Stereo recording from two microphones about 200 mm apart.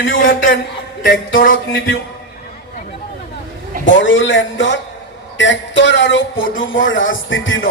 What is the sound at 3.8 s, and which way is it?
A man's voice, 70° left (ahead or behind).